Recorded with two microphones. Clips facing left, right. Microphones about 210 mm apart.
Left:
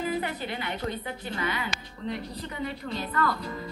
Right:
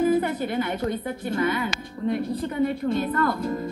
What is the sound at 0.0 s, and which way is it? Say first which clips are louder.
Speech: right 9 dB; 50° right (ahead or behind).